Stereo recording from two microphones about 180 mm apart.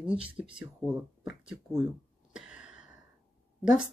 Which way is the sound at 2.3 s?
5° right (ahead or behind).